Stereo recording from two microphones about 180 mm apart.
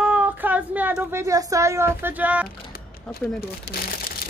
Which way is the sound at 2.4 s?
55° left (ahead or behind).